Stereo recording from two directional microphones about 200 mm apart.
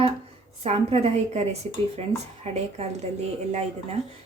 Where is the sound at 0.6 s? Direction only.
30° right (ahead or behind).